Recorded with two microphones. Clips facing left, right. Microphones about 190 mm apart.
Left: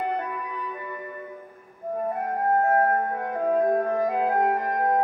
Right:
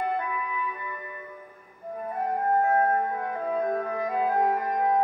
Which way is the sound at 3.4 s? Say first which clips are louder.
Left 6 dB; 45° left (ahead or behind).